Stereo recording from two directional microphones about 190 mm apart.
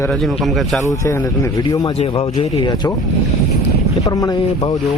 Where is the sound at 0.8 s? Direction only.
15° left (ahead or behind).